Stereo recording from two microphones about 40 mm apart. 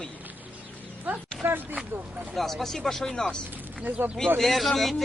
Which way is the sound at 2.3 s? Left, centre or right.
Centre.